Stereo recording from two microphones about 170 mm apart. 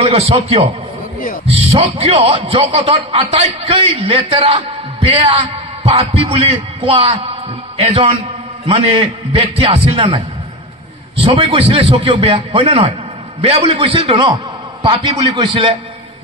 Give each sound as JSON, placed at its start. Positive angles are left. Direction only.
{"t": 0.0, "sound": "a man's voice", "side_deg": -35}